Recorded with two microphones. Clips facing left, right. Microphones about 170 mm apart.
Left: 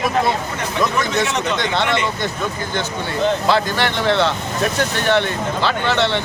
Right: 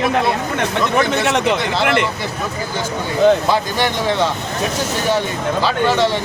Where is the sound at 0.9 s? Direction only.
60° right (ahead or behind).